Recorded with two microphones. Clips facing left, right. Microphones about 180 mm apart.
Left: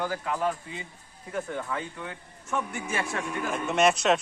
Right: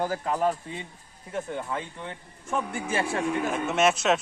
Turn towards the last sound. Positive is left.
turn(degrees=-5)  # may be behind; listen again after turning